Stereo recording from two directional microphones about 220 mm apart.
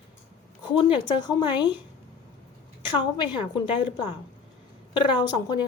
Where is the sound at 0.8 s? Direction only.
20° left (ahead or behind).